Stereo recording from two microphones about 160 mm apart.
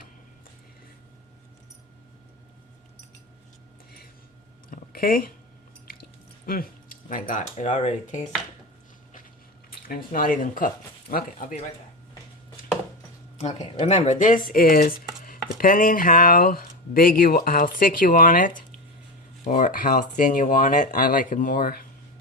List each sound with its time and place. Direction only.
4.7 s a sound: 65° left (ahead or behind)
5.9 s drip: 65° left (ahead or behind)
7.5 s speech: 45° left (ahead or behind)
9.6 s speech: 65° left (ahead or behind)
13.5 s speech: 25° left (ahead or behind)
13.8 s speech: 45° left (ahead or behind); by 21.8 s 65° left (ahead or behind)